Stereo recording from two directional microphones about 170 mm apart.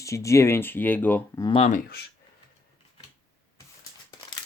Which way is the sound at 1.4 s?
30° left (ahead or behind).